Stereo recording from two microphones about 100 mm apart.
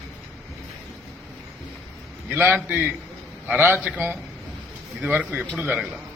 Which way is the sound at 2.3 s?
15° right (ahead or behind).